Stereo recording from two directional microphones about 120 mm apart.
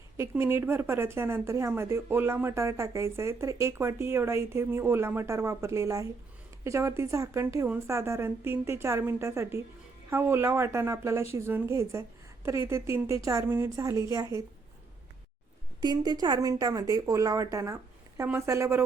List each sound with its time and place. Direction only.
0.2 s a woman's voice: 20° right (ahead or behind)
15.8 s a woman's voice: 35° right (ahead or behind)